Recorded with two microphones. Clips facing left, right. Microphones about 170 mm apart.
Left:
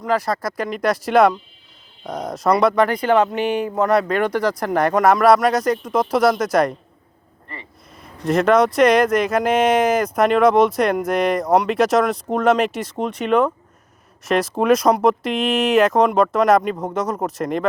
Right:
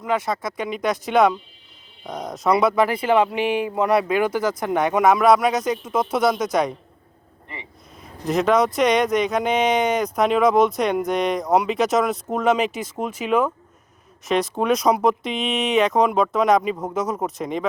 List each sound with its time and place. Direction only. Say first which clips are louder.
0.0 s speech: left 3 dB; centre (ahead or behind)
7.4 s vehicle: left 1 dB; 15° right (ahead or behind)
8.0 s speech: left 3 dB; centre (ahead or behind)